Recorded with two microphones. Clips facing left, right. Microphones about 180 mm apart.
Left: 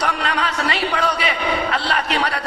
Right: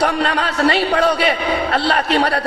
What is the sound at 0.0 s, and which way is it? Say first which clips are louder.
A man's voice: right 5 dB; 45° right (ahead or behind).